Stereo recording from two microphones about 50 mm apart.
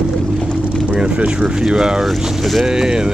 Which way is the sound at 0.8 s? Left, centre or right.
Centre.